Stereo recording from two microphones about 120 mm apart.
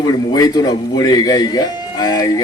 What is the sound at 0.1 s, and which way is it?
A man's voice, 30° left (ahead or behind).